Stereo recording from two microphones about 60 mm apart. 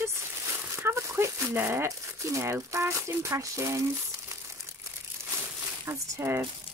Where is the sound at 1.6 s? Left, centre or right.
Right.